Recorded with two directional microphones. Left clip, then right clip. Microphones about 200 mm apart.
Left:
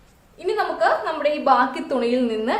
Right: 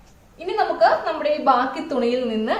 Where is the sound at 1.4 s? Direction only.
35° left (ahead or behind).